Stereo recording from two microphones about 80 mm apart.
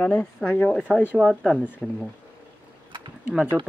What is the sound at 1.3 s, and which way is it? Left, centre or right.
Speech, centre.